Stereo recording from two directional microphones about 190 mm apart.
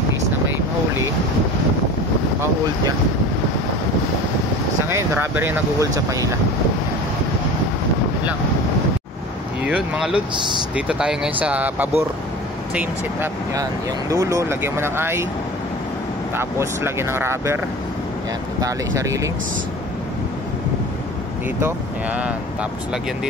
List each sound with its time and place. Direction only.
4.8 s speech: 15° right (ahead or behind)
9.7 s speech: 5° right (ahead or behind)
16.3 s speech: 15° right (ahead or behind)
18.6 s speech: 15° right (ahead or behind)
21.5 s speech: 10° right (ahead or behind)